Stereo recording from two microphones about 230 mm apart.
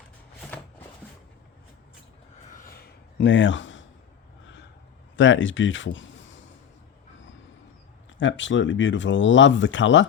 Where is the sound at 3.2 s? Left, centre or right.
Left.